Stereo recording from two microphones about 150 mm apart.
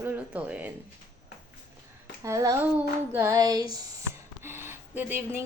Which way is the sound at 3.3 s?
25° right (ahead or behind).